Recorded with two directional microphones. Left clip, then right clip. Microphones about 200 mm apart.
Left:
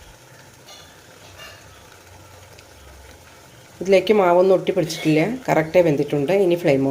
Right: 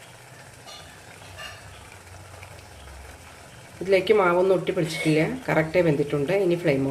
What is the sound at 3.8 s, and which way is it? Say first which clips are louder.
Speech: left 4 dB; 30° left (ahead or behind).